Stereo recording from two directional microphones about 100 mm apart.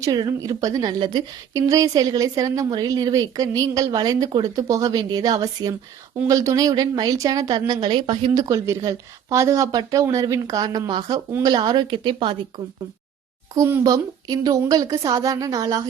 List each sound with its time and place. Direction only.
0.0 s speech: 35° right (ahead or behind)
1.5 s speech: 35° right (ahead or behind)
7.7 s a woman's voice: 50° right (ahead or behind)
8.4 s a woman's voice: 30° right (ahead or behind); by 12.4 s 55° right (ahead or behind)
13.8 s speech: 40° right (ahead or behind)